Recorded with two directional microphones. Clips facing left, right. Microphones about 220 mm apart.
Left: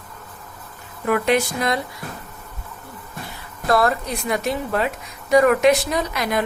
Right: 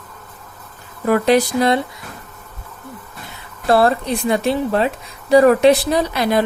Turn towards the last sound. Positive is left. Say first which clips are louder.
# right 5 dB
turn(degrees=-30)  # may be behind; listen again after turning